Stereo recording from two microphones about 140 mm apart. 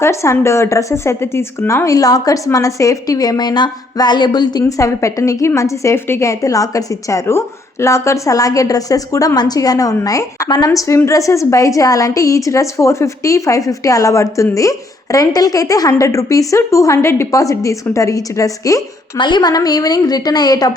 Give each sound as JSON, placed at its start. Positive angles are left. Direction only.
{"t": 0.0, "sound": "a woman's voice", "side_deg": 20}